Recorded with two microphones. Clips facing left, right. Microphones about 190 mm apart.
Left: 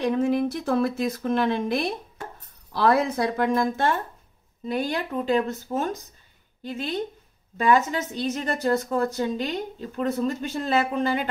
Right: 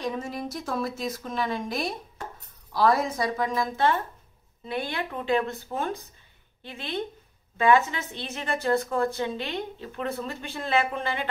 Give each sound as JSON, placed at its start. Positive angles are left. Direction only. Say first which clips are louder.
{"t": 0.0, "sound": "speech", "louder": "left 9 dB", "side_deg": 60}
{"t": 4.6, "sound": "a woman's voice", "louder": "left 4 dB", "side_deg": 40}